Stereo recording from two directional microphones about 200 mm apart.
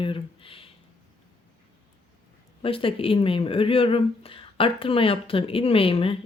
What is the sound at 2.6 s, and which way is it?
Speech, 25° left (ahead or behind).